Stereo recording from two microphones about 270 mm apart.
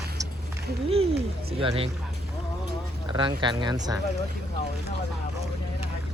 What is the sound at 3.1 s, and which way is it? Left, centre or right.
Speech, centre.